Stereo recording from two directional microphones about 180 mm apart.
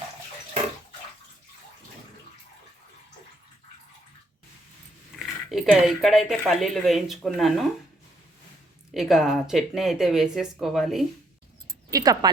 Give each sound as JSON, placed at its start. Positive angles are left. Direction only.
{"t": 5.2, "sound": "speech", "side_deg": 0}
{"t": 8.9, "sound": "speech", "side_deg": 0}
{"t": 11.9, "sound": "speech", "side_deg": -20}